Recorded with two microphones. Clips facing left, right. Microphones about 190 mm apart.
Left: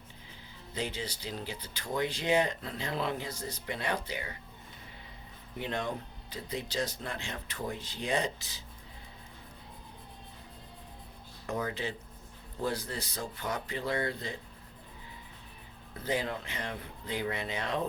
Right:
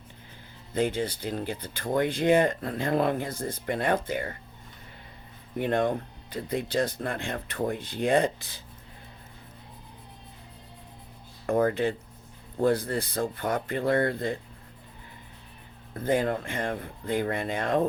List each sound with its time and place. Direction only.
0.7 s speech: 55° right (ahead or behind)
5.5 s speech: 55° right (ahead or behind)
11.4 s speech: 55° right (ahead or behind)
16.0 s speech: 50° right (ahead or behind)